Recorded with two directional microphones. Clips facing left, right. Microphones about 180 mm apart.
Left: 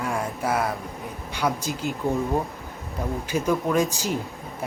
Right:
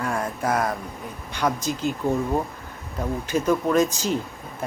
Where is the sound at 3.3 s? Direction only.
10° left (ahead or behind).